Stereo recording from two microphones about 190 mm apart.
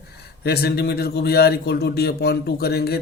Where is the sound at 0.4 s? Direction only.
60° left (ahead or behind).